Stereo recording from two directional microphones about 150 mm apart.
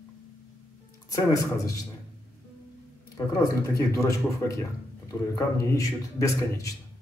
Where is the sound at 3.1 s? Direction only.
20° left (ahead or behind).